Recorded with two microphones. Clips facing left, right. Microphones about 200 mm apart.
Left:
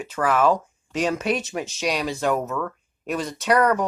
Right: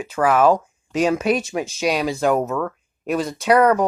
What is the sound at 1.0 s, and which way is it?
Speech, 5° right (ahead or behind).